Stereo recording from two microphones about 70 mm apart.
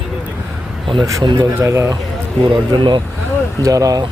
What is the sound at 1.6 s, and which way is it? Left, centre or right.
Speech, right.